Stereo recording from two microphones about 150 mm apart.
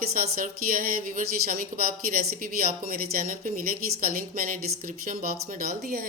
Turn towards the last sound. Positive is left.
turn(degrees=-65)  # may be behind; listen again after turning